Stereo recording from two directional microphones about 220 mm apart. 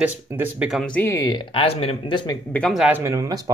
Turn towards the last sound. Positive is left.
turn(degrees=-15)  # may be behind; listen again after turning